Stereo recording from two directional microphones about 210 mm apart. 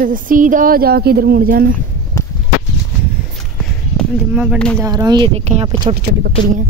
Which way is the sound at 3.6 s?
Centre (ahead or behind).